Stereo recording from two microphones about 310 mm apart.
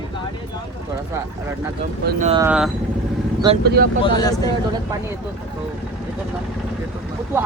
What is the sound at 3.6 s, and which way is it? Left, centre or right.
Speech, right.